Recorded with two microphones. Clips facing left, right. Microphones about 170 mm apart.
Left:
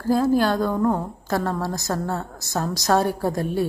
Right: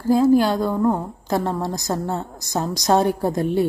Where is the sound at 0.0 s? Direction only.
15° right (ahead or behind).